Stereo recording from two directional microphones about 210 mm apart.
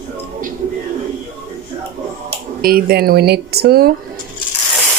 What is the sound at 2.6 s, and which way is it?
Speech, 45° right (ahead or behind).